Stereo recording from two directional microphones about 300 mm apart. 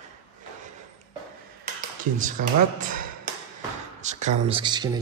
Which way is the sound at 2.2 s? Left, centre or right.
Right.